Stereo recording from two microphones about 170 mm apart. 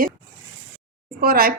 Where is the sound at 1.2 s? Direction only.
60° right (ahead or behind).